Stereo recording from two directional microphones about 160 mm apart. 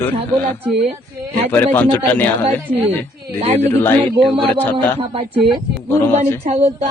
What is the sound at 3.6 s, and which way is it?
Speech, 15° left (ahead or behind).